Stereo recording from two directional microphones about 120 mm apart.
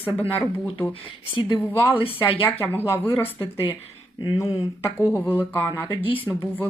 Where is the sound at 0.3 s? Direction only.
15° left (ahead or behind).